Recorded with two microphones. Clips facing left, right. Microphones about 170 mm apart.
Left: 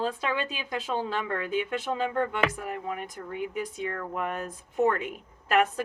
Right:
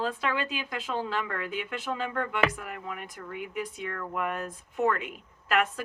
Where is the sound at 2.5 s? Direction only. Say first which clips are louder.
Left 5 dB; 35° left (ahead or behind).